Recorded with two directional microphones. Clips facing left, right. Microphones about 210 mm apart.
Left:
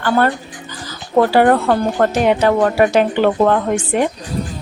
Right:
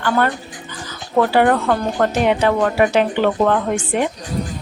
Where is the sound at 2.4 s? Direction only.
40° left (ahead or behind).